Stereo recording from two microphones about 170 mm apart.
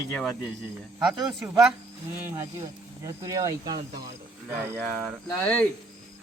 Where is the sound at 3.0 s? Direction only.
20° right (ahead or behind).